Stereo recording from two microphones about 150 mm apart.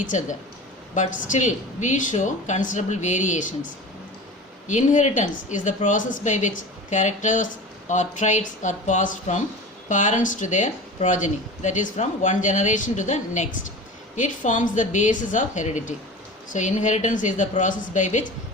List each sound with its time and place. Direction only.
0.1 s speech: 55° left (ahead or behind)
4.7 s speech: 55° left (ahead or behind)